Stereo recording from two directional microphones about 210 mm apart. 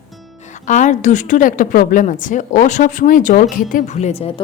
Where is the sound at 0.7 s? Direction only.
35° left (ahead or behind).